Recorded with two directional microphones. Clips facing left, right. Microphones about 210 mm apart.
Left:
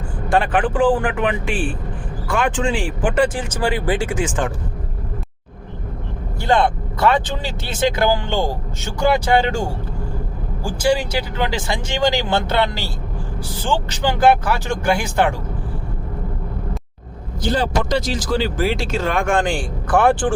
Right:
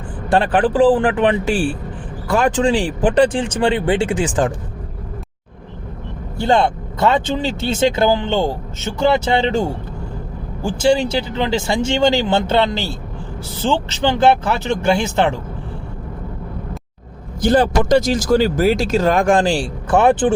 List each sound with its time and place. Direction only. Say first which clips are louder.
0.3 s speech: right 3 dB; 35° right (ahead or behind)
6.4 s speech: right 2 dB; 25° right (ahead or behind)
10.6 s speech: right 3 dB; 25° right (ahead or behind)
13.9 s speech: even; 25° right (ahead or behind)
17.5 s speech: right 6 dB; 50° right (ahead or behind); by 20.3 s 20° right (ahead or behind)